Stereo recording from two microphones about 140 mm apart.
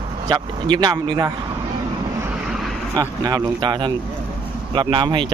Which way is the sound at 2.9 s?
30° right (ahead or behind).